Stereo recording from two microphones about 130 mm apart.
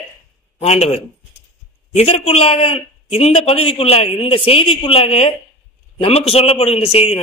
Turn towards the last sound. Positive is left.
turn(degrees=50)  # may be behind; listen again after turning